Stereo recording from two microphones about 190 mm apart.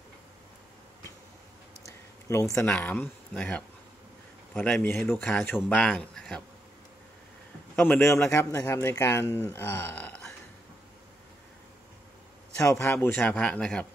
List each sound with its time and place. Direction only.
1.9 s a sound: 15° left (ahead or behind)
2.7 s speech: 5° left (ahead or behind)
7.7 s speech: 10° left (ahead or behind)
12.5 s speech: 10° left (ahead or behind)